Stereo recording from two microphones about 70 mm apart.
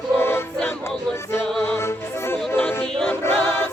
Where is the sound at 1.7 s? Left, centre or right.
Left.